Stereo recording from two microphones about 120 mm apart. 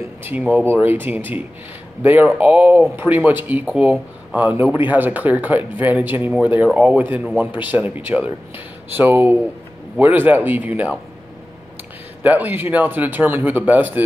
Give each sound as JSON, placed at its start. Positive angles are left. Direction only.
{"t": 0.2, "sound": "speech", "side_deg": -15}
{"t": 12.2, "sound": "speech", "side_deg": -15}